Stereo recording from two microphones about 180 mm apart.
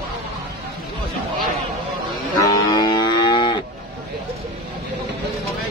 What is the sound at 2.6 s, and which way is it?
Moo, 20° left (ahead or behind).